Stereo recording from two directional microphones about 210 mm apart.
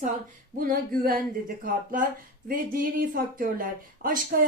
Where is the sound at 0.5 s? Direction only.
40° right (ahead or behind).